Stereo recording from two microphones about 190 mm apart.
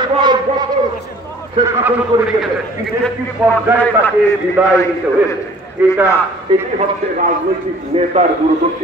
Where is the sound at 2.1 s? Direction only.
20° right (ahead or behind).